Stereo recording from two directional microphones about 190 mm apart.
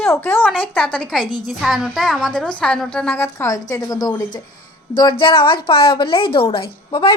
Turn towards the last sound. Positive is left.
turn(degrees=25)  # may be behind; listen again after turning